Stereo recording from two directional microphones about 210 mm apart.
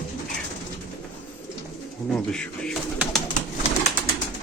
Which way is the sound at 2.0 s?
5° left (ahead or behind).